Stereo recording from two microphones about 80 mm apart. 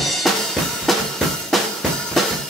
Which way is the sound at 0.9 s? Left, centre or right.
Centre.